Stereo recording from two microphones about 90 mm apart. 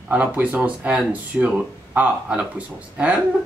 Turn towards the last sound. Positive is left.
turn(degrees=-15)  # may be behind; listen again after turning